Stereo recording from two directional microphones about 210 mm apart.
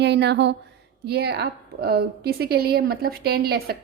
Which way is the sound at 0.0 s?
55° right (ahead or behind).